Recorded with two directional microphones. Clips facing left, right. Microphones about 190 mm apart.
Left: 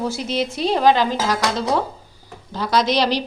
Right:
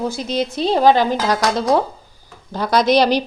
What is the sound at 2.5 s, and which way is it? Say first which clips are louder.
Speech: right 4 dB; 50° right (ahead or behind).